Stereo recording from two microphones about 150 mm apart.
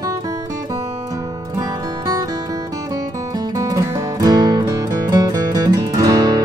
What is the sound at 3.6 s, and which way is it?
Music, 25° right (ahead or behind).